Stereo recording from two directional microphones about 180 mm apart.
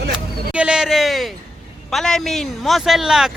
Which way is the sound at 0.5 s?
5° right (ahead or behind).